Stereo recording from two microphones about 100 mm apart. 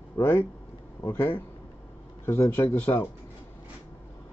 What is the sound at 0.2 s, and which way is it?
Speech, 25° left (ahead or behind).